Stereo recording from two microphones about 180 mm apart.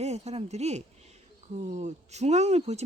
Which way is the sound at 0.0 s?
35° right (ahead or behind).